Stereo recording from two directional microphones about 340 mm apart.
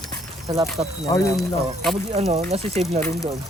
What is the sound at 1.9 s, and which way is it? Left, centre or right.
Speech, centre.